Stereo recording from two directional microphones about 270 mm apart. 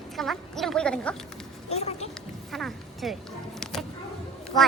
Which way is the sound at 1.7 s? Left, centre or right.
Left.